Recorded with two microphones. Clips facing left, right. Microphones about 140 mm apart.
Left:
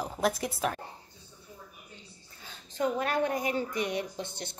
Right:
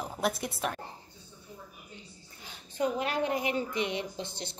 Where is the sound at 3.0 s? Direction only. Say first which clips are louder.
Left 1 dB; 45° left (ahead or behind).